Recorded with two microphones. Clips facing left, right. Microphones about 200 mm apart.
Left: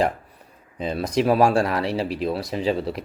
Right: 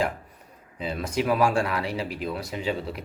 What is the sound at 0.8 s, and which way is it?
Speech, 40° left (ahead or behind).